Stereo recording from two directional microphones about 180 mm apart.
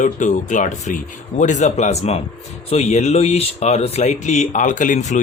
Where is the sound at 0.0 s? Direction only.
45° left (ahead or behind).